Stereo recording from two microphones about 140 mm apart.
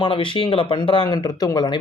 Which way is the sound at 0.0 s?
40° left (ahead or behind).